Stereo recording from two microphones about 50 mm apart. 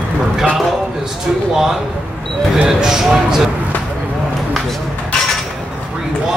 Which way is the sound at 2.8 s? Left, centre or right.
Centre.